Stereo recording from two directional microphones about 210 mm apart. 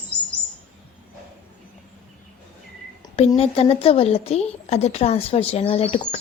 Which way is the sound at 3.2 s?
30° left (ahead or behind).